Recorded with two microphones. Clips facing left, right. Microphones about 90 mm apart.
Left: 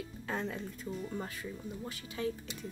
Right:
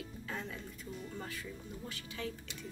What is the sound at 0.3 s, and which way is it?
Speech, 45° left (ahead or behind).